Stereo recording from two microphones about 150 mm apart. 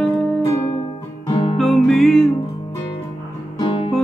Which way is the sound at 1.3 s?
35° left (ahead or behind).